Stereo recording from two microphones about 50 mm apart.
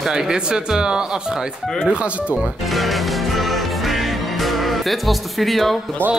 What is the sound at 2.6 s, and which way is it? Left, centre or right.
Music, centre.